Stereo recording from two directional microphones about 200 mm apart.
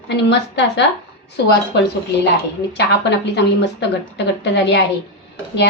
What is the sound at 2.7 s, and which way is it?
A woman's voice, 60° left (ahead or behind).